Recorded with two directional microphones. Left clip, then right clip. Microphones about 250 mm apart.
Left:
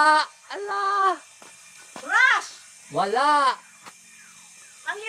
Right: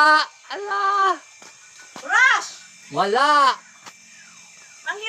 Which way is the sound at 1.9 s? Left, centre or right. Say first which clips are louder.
Right 3 dB; centre.